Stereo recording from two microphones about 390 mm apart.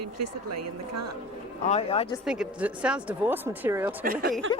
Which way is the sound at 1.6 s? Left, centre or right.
Centre.